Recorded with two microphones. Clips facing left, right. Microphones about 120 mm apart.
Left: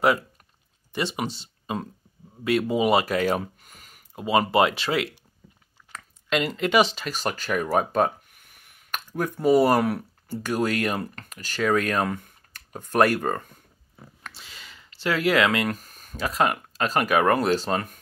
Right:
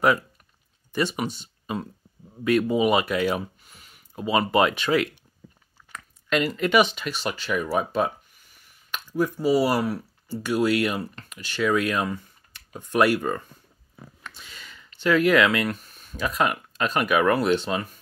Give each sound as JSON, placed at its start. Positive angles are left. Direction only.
{"t": 0.9, "sound": "speech", "side_deg": 25}
{"t": 4.1, "sound": "a sound", "side_deg": 25}
{"t": 4.4, "sound": "speech", "side_deg": 30}
{"t": 14.2, "sound": "speech", "side_deg": 30}